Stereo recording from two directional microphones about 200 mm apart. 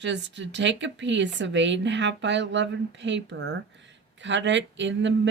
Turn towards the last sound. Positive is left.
turn(degrees=-65)  # may be behind; listen again after turning